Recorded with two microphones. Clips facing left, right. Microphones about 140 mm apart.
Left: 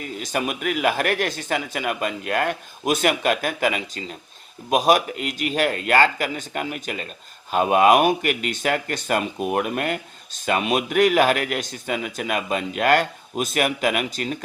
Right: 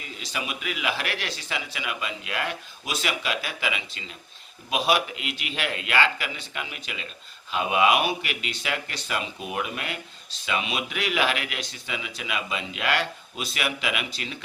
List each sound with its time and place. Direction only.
0.0 s speech: 50° left (ahead or behind)